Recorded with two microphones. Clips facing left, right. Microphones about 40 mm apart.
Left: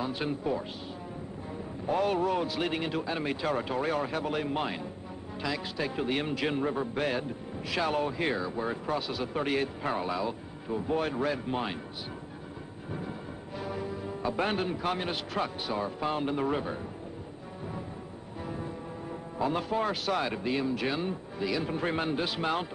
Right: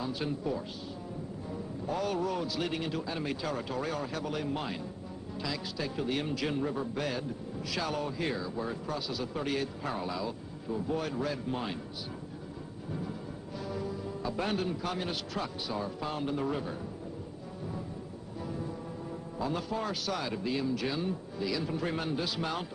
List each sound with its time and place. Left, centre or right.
0.0 s a man's voice: left
1.9 s a man's voice: left
13.6 s a man's voice: left
19.3 s a man's voice: left